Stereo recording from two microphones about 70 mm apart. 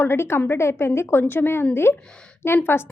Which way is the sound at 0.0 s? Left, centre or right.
Left.